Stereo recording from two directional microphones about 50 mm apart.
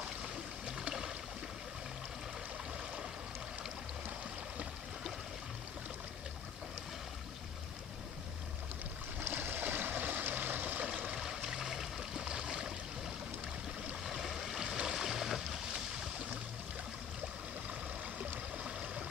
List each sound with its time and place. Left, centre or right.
0.2 s stream: centre
9.2 s stream: right
11.1 s a sound: centre
14.0 s boat: centre
17.7 s stream: right